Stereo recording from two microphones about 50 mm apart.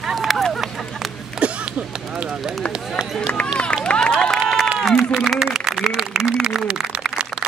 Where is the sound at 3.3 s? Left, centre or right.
Centre.